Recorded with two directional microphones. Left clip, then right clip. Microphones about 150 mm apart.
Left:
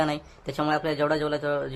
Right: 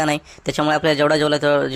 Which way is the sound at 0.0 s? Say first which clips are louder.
Right 7 dB; 35° right (ahead or behind).